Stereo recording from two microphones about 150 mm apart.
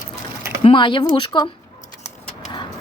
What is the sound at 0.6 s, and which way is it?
Speech, 35° left (ahead or behind).